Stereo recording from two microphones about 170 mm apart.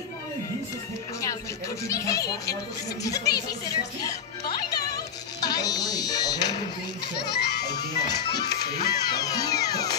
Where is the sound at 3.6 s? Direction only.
20° left (ahead or behind).